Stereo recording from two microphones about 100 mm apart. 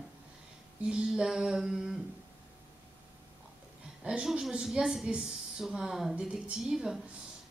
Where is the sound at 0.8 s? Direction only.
10° right (ahead or behind).